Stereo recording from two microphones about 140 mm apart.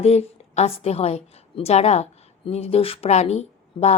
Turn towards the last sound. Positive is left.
turn(degrees=50)  # may be behind; listen again after turning